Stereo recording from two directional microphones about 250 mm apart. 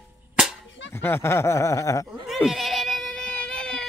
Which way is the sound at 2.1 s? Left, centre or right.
Centre.